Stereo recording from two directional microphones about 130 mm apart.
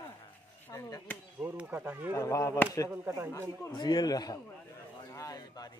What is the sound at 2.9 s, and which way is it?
Speech, 20° right (ahead or behind).